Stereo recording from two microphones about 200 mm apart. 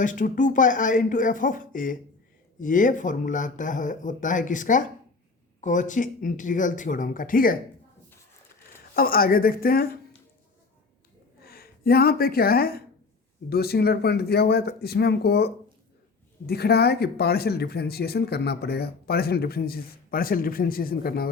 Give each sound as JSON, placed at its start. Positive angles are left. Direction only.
{"t": 0.0, "sound": "speech", "side_deg": 40}
{"t": 9.0, "sound": "speech", "side_deg": 45}
{"t": 11.4, "sound": "speech", "side_deg": 50}